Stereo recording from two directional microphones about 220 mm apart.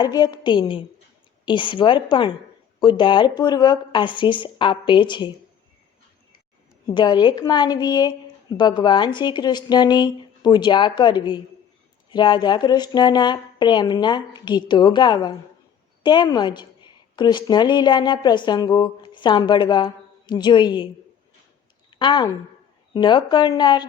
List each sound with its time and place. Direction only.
0.0 s a woman's voice: 20° left (ahead or behind)
6.8 s a woman's voice: 20° left (ahead or behind)
21.8 s a sound: 20° left (ahead or behind)
23.0 s a woman's voice: 20° left (ahead or behind)